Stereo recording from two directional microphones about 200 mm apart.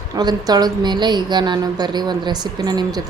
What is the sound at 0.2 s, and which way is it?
A woman's voice, 20° right (ahead or behind).